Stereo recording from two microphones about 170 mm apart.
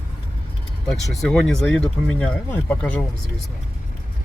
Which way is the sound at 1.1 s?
Centre (ahead or behind).